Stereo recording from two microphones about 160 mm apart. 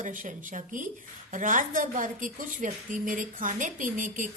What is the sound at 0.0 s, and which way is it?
A woman's voice, 55° right (ahead or behind).